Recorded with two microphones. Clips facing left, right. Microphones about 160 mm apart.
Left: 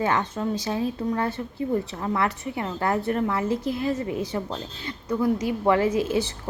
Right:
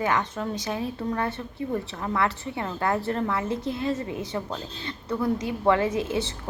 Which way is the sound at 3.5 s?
25° right (ahead or behind).